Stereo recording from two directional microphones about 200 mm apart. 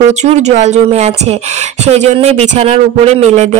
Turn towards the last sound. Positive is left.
turn(degrees=-35)  # may be behind; listen again after turning